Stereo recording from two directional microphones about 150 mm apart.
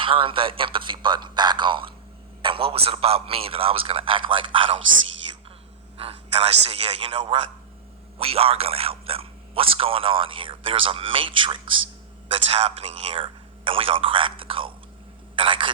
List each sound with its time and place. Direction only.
0.0 s a man's voice: 35° right (ahead or behind)
6.0 s a man's voice: 40° right (ahead or behind)